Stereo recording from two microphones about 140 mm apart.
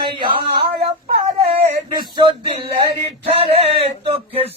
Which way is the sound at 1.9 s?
30° right (ahead or behind).